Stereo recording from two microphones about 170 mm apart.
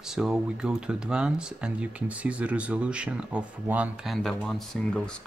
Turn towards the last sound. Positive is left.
turn(degrees=0)  # may be behind; listen again after turning